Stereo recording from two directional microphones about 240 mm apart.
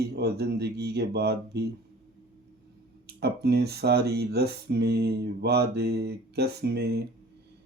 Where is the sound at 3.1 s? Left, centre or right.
Right.